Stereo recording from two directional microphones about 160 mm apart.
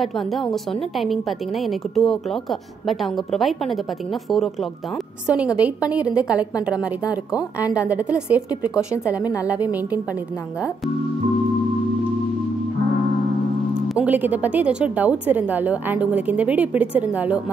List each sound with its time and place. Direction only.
0.0 s a woman's voice: centre (ahead or behind)
5.2 s a woman's voice: 5° right (ahead or behind)
7.1 s speech: 25° left (ahead or behind)
7.7 s a woman's voice: 10° right (ahead or behind)
9.2 s speech: 20° left (ahead or behind)
9.5 s a woman's voice: 10° right (ahead or behind)
13.9 s a woman's voice: 10° right (ahead or behind)